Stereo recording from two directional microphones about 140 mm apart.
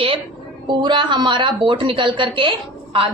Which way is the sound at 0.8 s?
30° right (ahead or behind).